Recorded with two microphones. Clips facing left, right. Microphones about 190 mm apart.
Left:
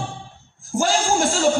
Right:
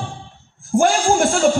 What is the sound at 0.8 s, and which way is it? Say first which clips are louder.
Speech: right 4 dB; 55° right (ahead or behind).